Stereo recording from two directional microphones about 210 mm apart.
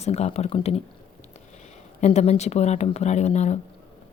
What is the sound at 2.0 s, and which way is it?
Speech, 30° left (ahead or behind).